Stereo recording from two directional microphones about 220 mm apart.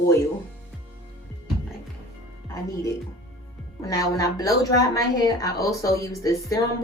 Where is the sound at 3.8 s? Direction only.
15° left (ahead or behind).